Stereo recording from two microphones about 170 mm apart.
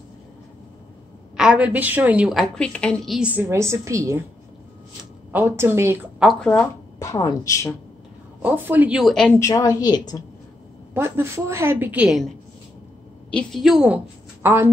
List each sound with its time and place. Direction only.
1.3 s a woman's voice: 5° right (ahead or behind)
3.2 s a woman's voice: 10° right (ahead or behind)
5.3 s a woman's voice: 15° right (ahead or behind)
6.2 s a woman's voice: 5° left (ahead or behind)
7.0 s a woman's voice: 20° left (ahead or behind)
8.4 s a woman's voice: 10° right (ahead or behind)
9.3 s a woman's voice: 20° left (ahead or behind)
11.0 s a woman's voice: 15° right (ahead or behind)
13.3 s a woman's voice: 5° left (ahead or behind)
14.4 s a woman's voice: 15° right (ahead or behind)